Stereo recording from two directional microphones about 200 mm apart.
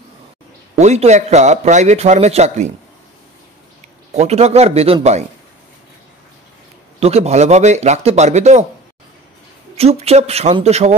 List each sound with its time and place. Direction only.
0.7 s speech: 35° right (ahead or behind)
4.1 s speech: 30° right (ahead or behind)
7.0 s speech: 30° right (ahead or behind)
9.8 s speech: 30° right (ahead or behind)